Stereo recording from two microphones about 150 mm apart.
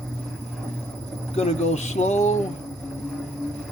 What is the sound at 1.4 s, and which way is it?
Speech, 50° left (ahead or behind).